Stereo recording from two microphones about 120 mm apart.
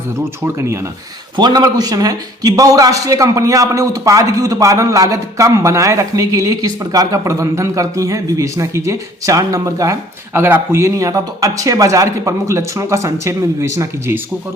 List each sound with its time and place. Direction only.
1.4 s a man's voice: 35° right (ahead or behind)